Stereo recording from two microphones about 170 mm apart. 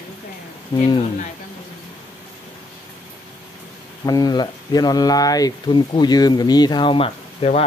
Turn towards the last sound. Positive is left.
turn(degrees=35)  # may be behind; listen again after turning